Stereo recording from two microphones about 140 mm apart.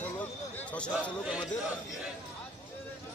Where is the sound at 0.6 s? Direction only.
10° left (ahead or behind).